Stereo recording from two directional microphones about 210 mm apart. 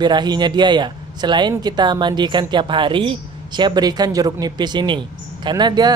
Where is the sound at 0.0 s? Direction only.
20° right (ahead or behind).